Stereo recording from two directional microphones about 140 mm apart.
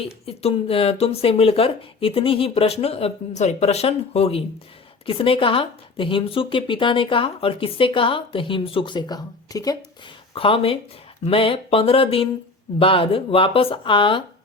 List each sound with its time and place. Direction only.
0.0 s speech: 45° left (ahead or behind); by 9.7 s 25° left (ahead or behind)
10.3 s speech: 40° left (ahead or behind)